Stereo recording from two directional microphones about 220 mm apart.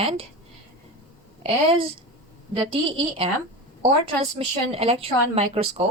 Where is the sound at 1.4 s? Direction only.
25° right (ahead or behind).